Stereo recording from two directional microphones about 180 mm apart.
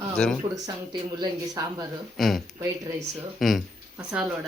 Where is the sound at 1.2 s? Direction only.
20° right (ahead or behind).